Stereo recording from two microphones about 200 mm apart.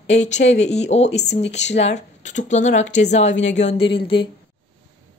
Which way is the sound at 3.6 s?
30° left (ahead or behind).